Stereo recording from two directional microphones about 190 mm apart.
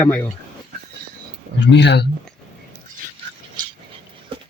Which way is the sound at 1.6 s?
65° left (ahead or behind).